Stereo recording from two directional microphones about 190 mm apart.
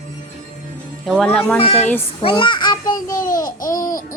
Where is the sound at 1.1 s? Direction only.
5° left (ahead or behind).